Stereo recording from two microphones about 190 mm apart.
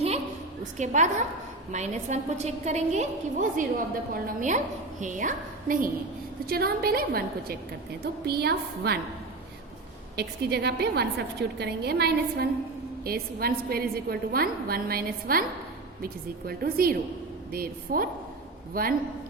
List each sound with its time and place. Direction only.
0.6 s a woman's voice: 40° right (ahead or behind); by 9.0 s 60° right (ahead or behind)
10.2 s a woman's voice: 60° right (ahead or behind)